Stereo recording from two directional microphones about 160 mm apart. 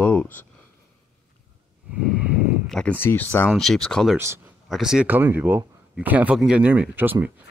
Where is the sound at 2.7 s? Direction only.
10° left (ahead or behind).